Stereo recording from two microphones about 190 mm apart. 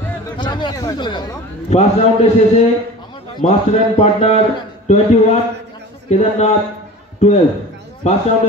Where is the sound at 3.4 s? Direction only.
35° left (ahead or behind).